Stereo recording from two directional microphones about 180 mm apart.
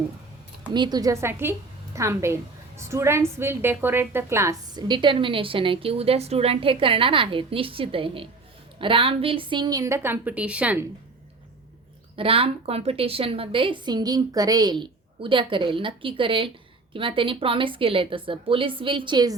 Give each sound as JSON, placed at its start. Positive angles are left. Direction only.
{"t": 0.7, "sound": "a woman's voice", "side_deg": -25}
{"t": 12.1, "sound": "a woman's voice", "side_deg": -30}